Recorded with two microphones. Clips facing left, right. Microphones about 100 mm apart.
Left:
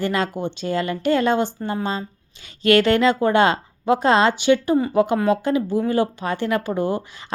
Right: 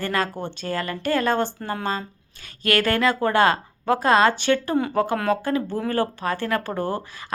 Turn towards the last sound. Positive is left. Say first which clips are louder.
# left 3 dB
turn(degrees=15)  # may be behind; listen again after turning